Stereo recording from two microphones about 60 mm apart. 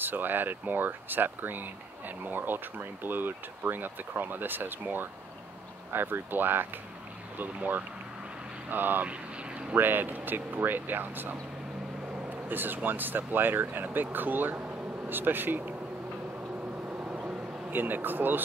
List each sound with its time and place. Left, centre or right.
0.0 s speech: right
12.4 s speech: right
17.6 s speech: right